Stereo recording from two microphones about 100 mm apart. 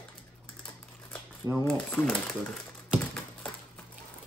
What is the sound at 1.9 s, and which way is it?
Speech, 15° left (ahead or behind).